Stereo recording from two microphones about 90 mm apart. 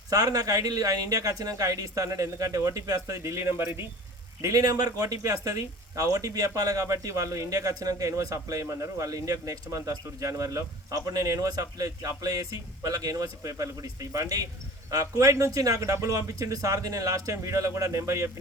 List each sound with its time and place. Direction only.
0.1 s speech: 45° right (ahead or behind)